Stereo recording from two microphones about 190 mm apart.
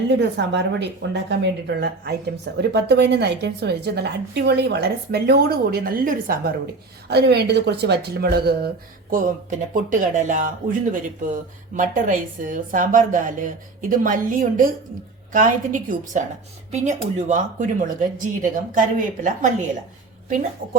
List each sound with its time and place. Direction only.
0.1 s speech: 65° right (ahead or behind); by 19.5 s 45° right (ahead or behind)